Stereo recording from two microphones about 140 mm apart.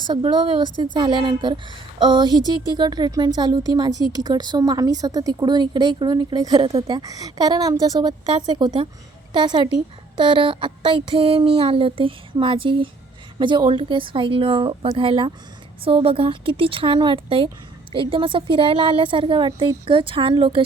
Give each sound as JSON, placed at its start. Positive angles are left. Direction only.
{"t": 0.1, "sound": "child singing", "side_deg": -35}